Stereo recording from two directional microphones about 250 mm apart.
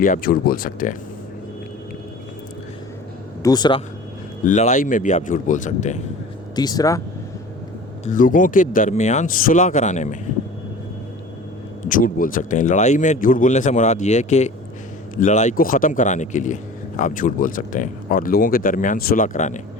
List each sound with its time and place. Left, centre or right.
0.0 s speech: left
3.4 s speech: centre
4.4 s speech: left
6.6 s speech: centre
8.0 s speech: left
11.9 s speech: left